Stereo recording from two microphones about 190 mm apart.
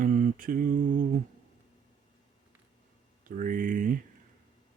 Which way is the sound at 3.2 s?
45° right (ahead or behind).